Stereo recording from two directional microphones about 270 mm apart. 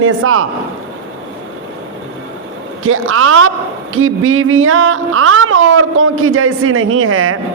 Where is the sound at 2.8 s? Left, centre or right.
Right.